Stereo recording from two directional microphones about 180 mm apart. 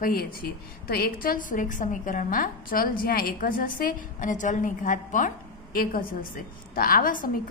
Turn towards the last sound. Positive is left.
turn(degrees=50)  # may be behind; listen again after turning